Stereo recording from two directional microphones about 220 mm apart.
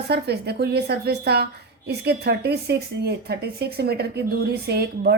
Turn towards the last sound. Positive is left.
turn(degrees=-50)  # may be behind; listen again after turning